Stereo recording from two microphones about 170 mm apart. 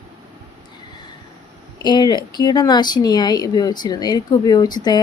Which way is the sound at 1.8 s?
25° left (ahead or behind).